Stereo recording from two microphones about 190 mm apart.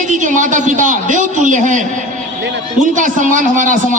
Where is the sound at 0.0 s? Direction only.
40° right (ahead or behind).